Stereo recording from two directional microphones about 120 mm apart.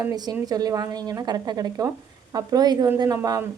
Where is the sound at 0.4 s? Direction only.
30° right (ahead or behind).